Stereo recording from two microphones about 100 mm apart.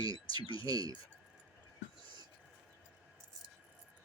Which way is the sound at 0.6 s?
40° right (ahead or behind).